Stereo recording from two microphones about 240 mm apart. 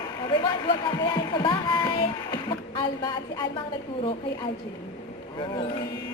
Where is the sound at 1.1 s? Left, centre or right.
Centre.